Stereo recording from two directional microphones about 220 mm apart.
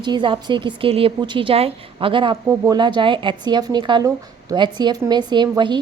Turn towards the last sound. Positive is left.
turn(degrees=-20)  # may be behind; listen again after turning